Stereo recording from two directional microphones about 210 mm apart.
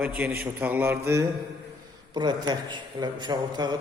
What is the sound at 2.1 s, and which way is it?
A man's voice, 20° right (ahead or behind).